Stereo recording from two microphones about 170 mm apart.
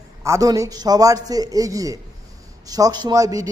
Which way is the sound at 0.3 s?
20° right (ahead or behind).